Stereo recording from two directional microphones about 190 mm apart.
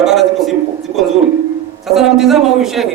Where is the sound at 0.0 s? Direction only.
Centre (ahead or behind).